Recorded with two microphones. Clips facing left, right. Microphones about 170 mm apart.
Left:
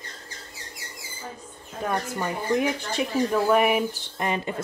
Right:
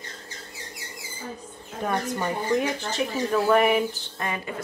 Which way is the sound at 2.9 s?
10° left (ahead or behind).